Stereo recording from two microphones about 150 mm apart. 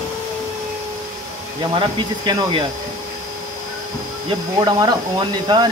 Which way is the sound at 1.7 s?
30° right (ahead or behind).